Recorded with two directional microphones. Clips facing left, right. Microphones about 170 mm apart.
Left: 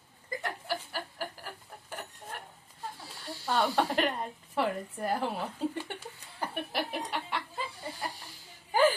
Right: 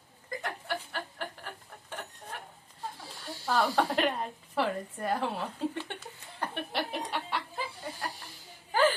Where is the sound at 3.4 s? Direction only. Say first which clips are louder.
Right 1 dB; centre (ahead or behind).